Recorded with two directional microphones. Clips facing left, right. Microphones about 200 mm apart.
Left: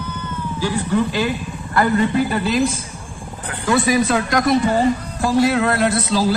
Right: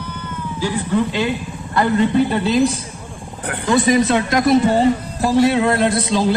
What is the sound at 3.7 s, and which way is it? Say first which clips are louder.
Speech: right 2 dB; 20° right (ahead or behind).